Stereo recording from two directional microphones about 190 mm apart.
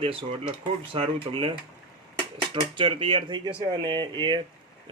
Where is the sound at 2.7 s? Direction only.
25° right (ahead or behind).